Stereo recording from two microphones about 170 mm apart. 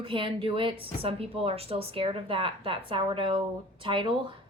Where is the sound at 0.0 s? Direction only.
30° right (ahead or behind).